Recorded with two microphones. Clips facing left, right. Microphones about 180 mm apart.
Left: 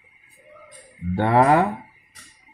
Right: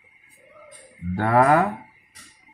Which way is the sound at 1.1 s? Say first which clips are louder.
Left 1 dB; 25° left (ahead or behind).